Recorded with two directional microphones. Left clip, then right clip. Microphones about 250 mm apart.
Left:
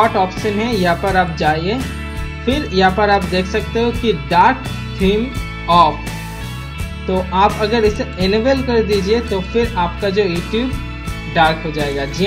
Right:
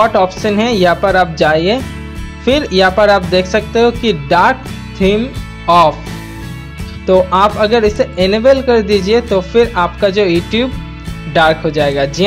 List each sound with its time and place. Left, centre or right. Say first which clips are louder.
0.1 s speech: right 5 dB; right
7.1 s speech: right 5 dB; right